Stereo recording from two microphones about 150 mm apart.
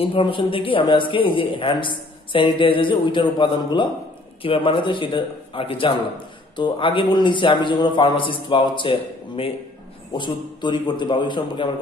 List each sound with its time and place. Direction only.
0.0 s a man's voice: 35° left (ahead or behind)